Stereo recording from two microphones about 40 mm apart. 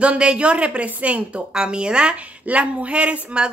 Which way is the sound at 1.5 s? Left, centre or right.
Right.